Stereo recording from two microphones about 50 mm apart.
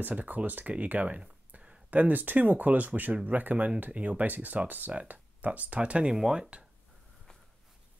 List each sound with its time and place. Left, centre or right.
0.0 s speech: right
1.9 s speech: right
6.1 s speech: centre